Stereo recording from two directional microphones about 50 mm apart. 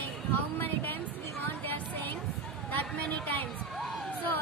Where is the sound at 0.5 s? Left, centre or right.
Left.